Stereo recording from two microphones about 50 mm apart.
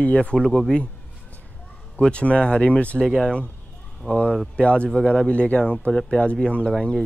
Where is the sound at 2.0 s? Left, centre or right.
Left.